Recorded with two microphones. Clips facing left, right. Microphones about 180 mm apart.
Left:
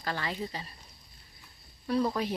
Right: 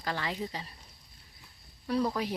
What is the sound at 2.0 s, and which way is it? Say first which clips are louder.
Speech: left 1 dB; 10° right (ahead or behind).